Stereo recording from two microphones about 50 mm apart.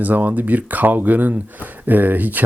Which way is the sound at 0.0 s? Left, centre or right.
Right.